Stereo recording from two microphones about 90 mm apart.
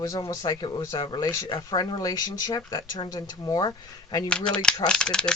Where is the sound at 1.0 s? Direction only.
55° left (ahead or behind).